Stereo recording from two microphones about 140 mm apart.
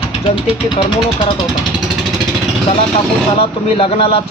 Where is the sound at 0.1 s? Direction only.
45° left (ahead or behind).